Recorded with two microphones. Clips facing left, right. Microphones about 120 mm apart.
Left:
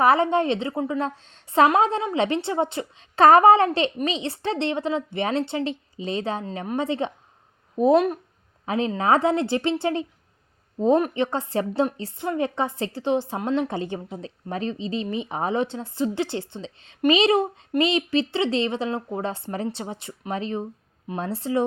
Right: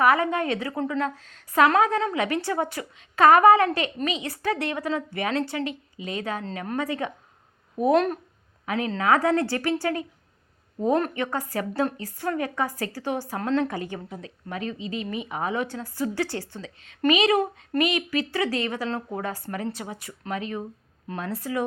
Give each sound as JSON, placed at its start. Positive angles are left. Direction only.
{"t": 0.0, "sound": "speech", "side_deg": 30}
{"t": 7.9, "sound": "speech", "side_deg": 10}
{"t": 8.6, "sound": "speech", "side_deg": 25}